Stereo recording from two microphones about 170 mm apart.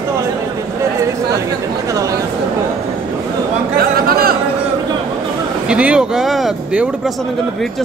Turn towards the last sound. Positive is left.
turn(degrees=-5)  # may be behind; listen again after turning